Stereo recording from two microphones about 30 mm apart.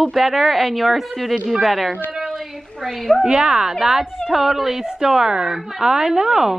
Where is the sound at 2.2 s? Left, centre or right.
Centre.